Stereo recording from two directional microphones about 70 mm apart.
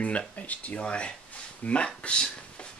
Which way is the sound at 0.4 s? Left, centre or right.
Left.